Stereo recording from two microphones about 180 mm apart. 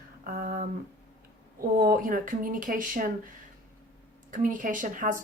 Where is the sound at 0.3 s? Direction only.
55° right (ahead or behind).